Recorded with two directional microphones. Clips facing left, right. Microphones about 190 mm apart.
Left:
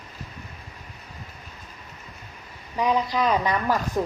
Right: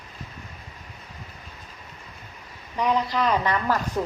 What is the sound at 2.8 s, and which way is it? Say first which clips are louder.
Speech: left 1 dB; 10° left (ahead or behind).